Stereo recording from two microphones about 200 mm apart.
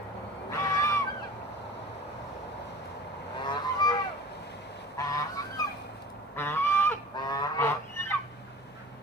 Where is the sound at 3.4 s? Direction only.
20° left (ahead or behind).